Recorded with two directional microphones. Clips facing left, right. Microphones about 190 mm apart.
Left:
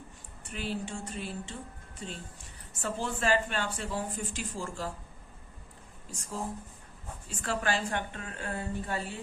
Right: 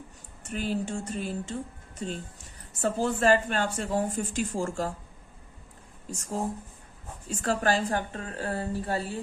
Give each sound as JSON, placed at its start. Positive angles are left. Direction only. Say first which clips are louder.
{"t": 0.4, "sound": "a woman's voice", "louder": "right 6 dB", "side_deg": -45}
{"t": 6.1, "sound": "a woman's voice", "louder": "right 6 dB", "side_deg": -45}